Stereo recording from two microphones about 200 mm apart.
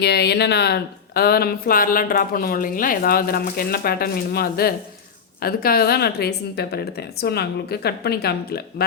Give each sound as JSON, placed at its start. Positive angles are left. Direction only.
{"t": 0.0, "sound": "speech", "side_deg": 55}